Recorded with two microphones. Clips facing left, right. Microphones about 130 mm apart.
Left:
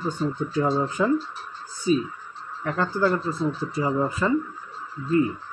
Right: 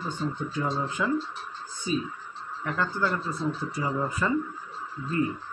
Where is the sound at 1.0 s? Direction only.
25° left (ahead or behind).